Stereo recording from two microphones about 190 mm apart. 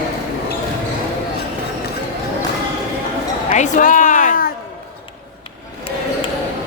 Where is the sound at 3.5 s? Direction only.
40° left (ahead or behind).